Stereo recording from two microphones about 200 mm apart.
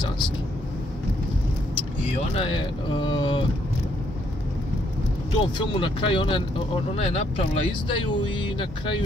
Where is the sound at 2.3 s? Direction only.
25° left (ahead or behind).